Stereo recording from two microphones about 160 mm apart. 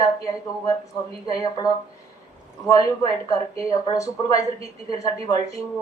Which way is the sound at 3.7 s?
20° left (ahead or behind).